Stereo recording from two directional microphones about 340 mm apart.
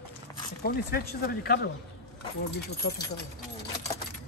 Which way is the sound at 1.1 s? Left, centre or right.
Left.